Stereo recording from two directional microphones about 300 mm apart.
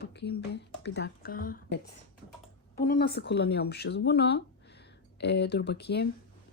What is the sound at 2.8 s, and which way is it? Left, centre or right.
Speech, left.